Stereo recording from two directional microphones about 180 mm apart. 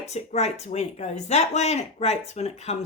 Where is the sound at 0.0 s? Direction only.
35° left (ahead or behind).